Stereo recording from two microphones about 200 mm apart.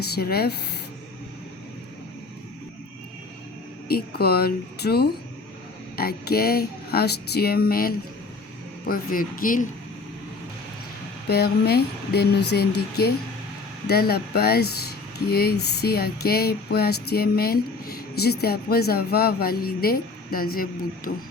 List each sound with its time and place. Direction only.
0.2 s speech: 50° left (ahead or behind)
3.8 s speech: 50° left (ahead or behind)
11.3 s speech: 50° left (ahead or behind)